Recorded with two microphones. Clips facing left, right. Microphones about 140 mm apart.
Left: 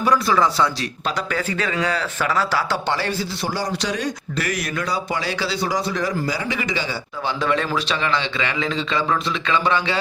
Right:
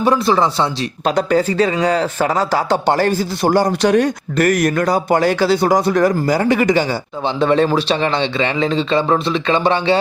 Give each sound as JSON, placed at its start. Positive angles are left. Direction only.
{"t": 0.0, "sound": "speech", "side_deg": -25}
{"t": 1.0, "sound": "speech", "side_deg": -45}
{"t": 7.3, "sound": "a man's voice", "side_deg": -30}